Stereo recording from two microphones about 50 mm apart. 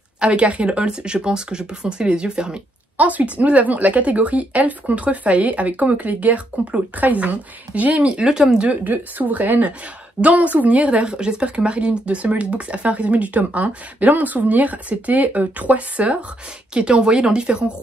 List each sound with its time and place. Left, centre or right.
0.2 s speech: right
8.6 s a woman's voice: right; by 17.7 s centre